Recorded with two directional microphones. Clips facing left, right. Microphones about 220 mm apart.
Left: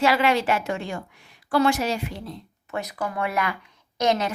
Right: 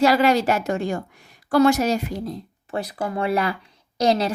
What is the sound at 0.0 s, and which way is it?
A child's voice, 40° right (ahead or behind).